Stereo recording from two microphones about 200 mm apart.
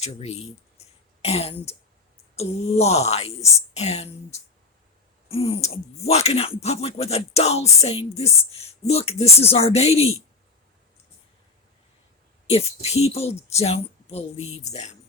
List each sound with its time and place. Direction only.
0.0 s speech: 30° left (ahead or behind)
0.8 s throat clearing: 30° left (ahead or behind)
2.3 s speech: 30° left (ahead or behind)
12.5 s speech: 30° left (ahead or behind)